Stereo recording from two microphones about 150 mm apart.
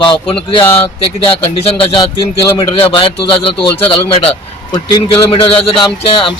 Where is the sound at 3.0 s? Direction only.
35° left (ahead or behind).